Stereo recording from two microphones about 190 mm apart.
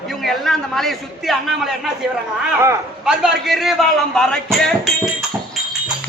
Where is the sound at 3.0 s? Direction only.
Centre (ahead or behind).